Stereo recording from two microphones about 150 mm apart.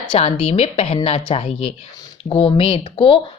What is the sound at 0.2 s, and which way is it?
A woman's voice, 45° left (ahead or behind).